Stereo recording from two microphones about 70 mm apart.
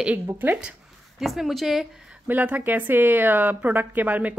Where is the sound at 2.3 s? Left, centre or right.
Right.